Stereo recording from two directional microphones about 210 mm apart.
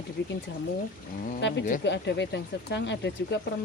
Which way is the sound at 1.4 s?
60° left (ahead or behind).